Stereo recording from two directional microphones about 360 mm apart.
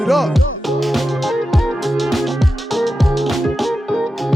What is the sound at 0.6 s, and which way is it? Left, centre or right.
Music, centre.